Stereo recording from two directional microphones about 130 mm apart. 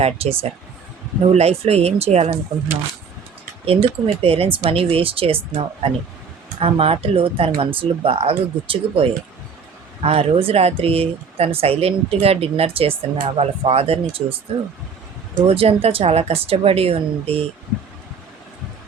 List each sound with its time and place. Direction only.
0.0 s speech: 50° right (ahead or behind)
6.6 s speech: 45° right (ahead or behind)
15.4 s speech: 45° right (ahead or behind)